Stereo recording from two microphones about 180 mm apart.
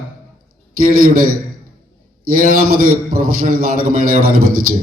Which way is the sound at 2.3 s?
50° right (ahead or behind).